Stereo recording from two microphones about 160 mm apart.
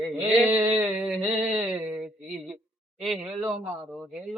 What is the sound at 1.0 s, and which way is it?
A man's voice, centre (ahead or behind).